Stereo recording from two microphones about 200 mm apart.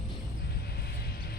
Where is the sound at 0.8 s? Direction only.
50° left (ahead or behind).